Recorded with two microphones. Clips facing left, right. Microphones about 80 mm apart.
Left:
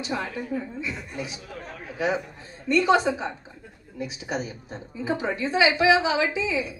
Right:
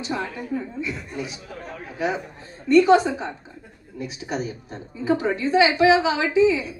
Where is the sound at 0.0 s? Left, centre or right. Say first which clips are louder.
Right 1 dB; right.